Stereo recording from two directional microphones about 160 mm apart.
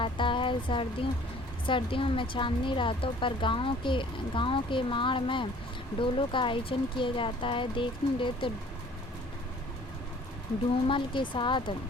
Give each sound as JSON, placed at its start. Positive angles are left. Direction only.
{"t": 0.0, "sound": "a woman's voice", "side_deg": 30}
{"t": 10.8, "sound": "a woman's voice", "side_deg": 30}